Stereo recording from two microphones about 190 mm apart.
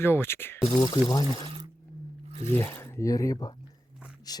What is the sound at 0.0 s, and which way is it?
Speech, 10° left (ahead or behind).